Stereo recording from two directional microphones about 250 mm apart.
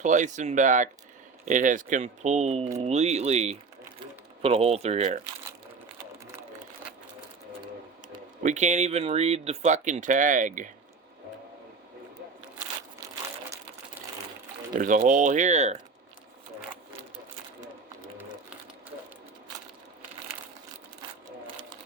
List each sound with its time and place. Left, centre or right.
0.0 s speech: right
8.4 s speech: right
14.8 s speech: right